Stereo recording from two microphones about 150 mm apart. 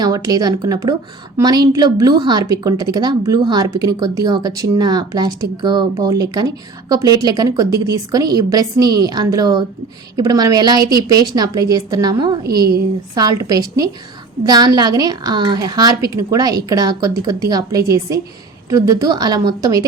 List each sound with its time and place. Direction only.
0.0 s a woman's voice: 25° right (ahead or behind)